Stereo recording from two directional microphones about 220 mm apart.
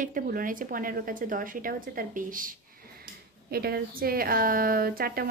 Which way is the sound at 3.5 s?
45° right (ahead or behind).